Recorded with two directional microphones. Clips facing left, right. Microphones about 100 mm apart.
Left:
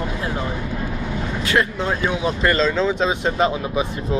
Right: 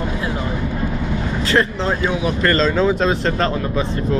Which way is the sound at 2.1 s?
20° left (ahead or behind).